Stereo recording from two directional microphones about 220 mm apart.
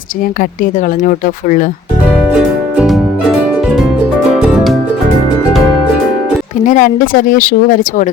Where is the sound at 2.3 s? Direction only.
Centre (ahead or behind).